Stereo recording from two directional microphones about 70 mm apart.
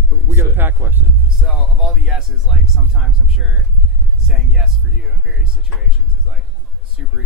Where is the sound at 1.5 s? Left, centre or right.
Centre.